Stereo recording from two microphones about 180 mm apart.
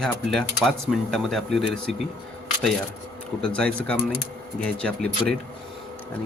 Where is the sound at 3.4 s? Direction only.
5° left (ahead or behind).